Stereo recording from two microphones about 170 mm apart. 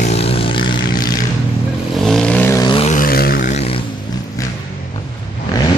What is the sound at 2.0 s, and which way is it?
Vehicle, 5° left (ahead or behind).